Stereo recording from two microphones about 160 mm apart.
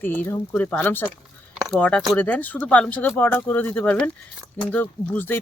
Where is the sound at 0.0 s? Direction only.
10° left (ahead or behind).